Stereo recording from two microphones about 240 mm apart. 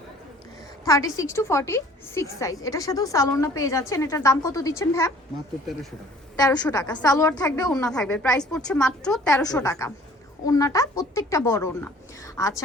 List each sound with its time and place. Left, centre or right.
0.9 s a woman's voice: centre
6.3 s a woman's voice: centre
7.9 s a woman's voice: centre
9.6 s a woman's voice: centre